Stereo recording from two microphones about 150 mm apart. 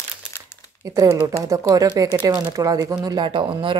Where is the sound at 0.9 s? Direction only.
20° right (ahead or behind).